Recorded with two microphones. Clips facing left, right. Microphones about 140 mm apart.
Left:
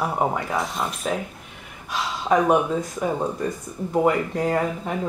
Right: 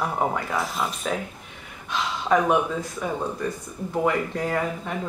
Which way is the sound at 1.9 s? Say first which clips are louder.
Left 1 dB; 10° left (ahead or behind).